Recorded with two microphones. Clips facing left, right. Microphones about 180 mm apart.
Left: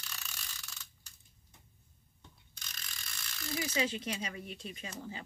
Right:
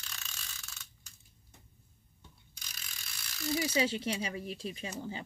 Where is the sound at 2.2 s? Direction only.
5° right (ahead or behind).